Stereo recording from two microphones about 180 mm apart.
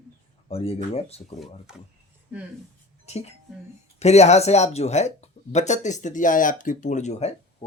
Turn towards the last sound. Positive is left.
turn(degrees=40)  # may be behind; listen again after turning